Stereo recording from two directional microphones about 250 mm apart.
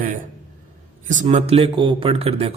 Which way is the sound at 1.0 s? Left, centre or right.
Right.